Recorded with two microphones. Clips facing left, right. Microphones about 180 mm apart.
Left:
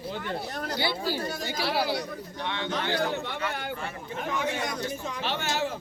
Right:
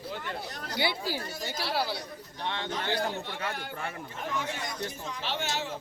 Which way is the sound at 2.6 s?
70° left (ahead or behind).